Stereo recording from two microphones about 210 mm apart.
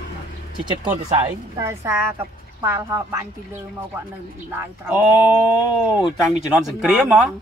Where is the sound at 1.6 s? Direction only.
10° right (ahead or behind).